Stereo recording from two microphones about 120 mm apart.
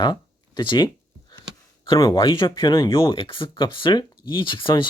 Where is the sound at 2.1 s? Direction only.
40° left (ahead or behind).